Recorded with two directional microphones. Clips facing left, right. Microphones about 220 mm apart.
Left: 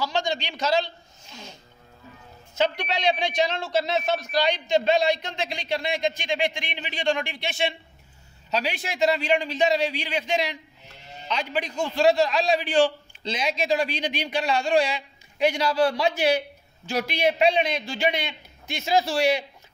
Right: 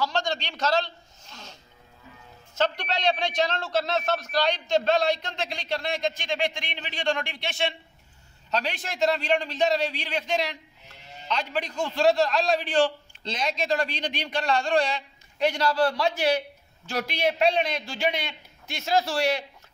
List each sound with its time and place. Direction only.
0.0 s a sound: 5° left (ahead or behind)
2.5 s a man's voice: 5° left (ahead or behind)
15.9 s a man's voice: 20° left (ahead or behind)
17.0 s a man's voice: centre (ahead or behind)